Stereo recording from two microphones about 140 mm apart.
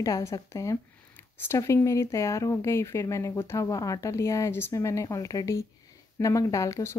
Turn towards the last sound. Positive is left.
turn(degrees=20)  # may be behind; listen again after turning